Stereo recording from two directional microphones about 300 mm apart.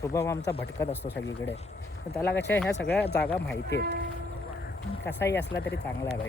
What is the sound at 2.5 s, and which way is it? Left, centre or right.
Speech, centre.